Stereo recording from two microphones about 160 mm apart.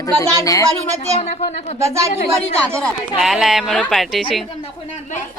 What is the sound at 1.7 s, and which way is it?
Speech, 20° right (ahead or behind).